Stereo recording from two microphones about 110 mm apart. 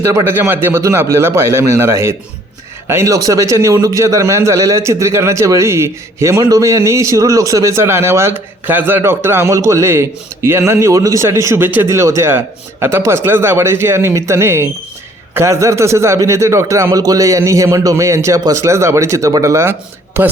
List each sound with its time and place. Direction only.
0.3 s a man's voice: 20° right (ahead or behind)